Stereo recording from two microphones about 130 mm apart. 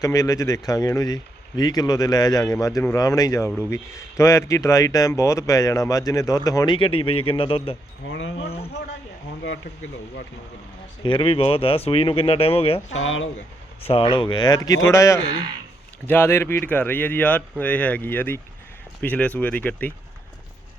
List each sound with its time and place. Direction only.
0.0 s a man's voice: 25° left (ahead or behind)
6.7 s speech: 45° left (ahead or behind)
8.4 s a sound: 50° left (ahead or behind)
11.0 s speech: 40° left (ahead or behind)
13.8 s speech: 45° left (ahead or behind); by 19.9 s 10° left (ahead or behind)